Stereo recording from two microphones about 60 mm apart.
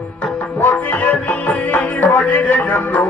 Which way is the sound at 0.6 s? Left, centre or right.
Left.